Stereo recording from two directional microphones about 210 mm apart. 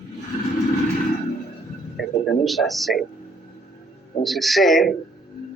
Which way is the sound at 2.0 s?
Centre (ahead or behind).